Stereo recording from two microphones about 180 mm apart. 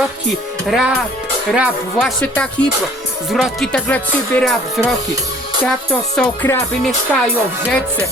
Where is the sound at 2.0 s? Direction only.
5° left (ahead or behind).